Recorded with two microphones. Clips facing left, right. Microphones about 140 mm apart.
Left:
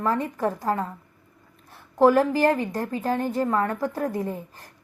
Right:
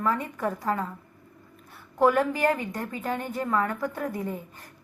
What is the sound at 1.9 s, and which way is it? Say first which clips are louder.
A woman's voice: left 4 dB; 30° left (ahead or behind).